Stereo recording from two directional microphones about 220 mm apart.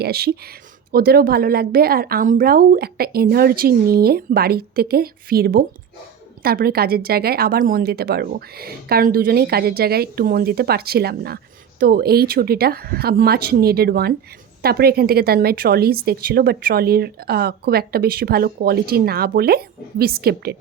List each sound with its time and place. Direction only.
0.0 s a woman's voice: 45° right (ahead or behind)